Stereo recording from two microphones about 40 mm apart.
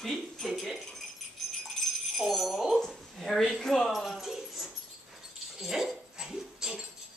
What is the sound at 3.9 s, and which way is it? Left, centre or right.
Jingle bell, centre.